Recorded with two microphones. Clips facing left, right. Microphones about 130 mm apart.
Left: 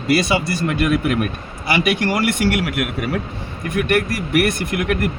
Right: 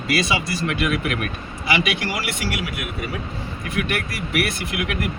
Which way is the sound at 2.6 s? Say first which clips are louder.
Left 7 dB; 65° left (ahead or behind).